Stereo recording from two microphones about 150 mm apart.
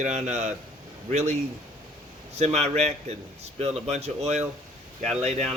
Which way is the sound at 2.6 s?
50° right (ahead or behind).